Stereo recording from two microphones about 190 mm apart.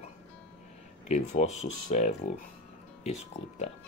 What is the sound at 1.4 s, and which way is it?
Speech, 35° left (ahead or behind).